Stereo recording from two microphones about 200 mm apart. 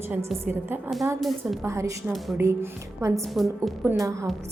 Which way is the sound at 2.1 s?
Centre (ahead or behind).